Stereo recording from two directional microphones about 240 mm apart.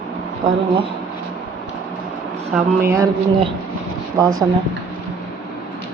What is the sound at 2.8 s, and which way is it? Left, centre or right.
Speech, centre.